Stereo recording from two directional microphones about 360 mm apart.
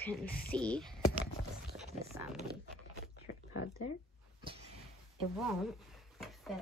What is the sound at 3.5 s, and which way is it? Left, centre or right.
Speech, left.